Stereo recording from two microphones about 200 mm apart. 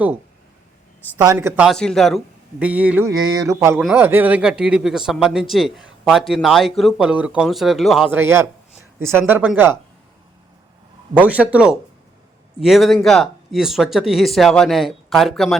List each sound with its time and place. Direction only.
1.2 s a man's voice: 15° right (ahead or behind)
3.1 s a man's voice: 20° right (ahead or behind)
11.2 s a man's voice: 5° right (ahead or behind)